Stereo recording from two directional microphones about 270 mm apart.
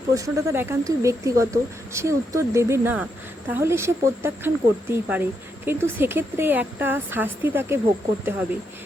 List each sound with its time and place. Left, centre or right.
0.1 s speech: centre